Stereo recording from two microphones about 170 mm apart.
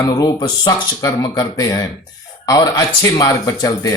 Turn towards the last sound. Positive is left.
turn(degrees=20)  # may be behind; listen again after turning